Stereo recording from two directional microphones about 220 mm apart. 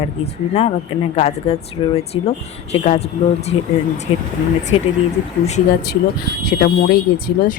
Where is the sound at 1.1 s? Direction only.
30° left (ahead or behind).